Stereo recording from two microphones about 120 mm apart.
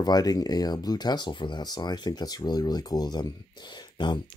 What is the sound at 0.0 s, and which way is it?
Speech, 35° left (ahead or behind).